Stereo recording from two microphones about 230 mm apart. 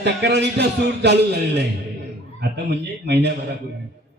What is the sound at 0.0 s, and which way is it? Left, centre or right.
A man's voice, right.